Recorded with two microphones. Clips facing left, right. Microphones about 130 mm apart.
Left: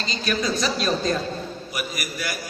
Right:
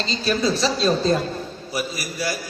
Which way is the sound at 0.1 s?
30° right (ahead or behind).